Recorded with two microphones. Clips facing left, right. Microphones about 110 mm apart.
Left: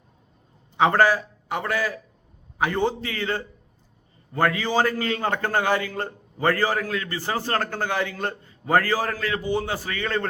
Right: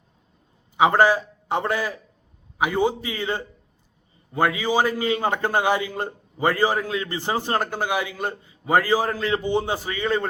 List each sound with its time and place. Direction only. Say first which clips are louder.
0.8 s a man's voice: right 1 dB; 15° right (ahead or behind)
2.6 s a man's voice: right 2 dB; 10° right (ahead or behind)